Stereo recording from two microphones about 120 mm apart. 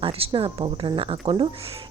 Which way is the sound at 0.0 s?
50° right (ahead or behind).